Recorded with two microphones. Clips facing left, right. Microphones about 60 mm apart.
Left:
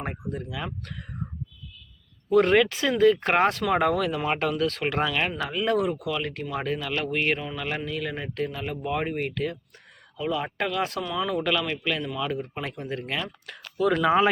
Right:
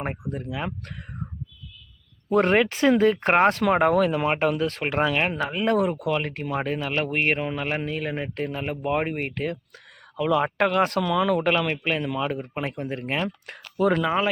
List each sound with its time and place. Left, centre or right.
0.0 s speech: right
2.3 s speech: right
3.9 s speech: right
10.2 s speech: right
14.0 s speech: centre